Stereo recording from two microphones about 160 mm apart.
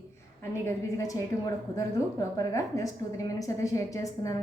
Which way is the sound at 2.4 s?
20° left (ahead or behind).